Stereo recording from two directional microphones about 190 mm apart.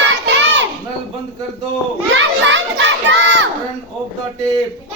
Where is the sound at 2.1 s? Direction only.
70° right (ahead or behind).